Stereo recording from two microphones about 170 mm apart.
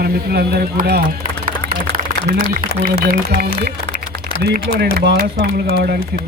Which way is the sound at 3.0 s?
55° right (ahead or behind).